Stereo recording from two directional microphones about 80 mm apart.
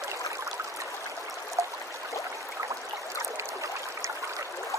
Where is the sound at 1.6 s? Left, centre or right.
Right.